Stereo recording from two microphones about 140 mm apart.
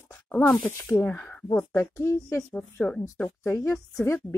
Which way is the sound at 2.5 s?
10° left (ahead or behind).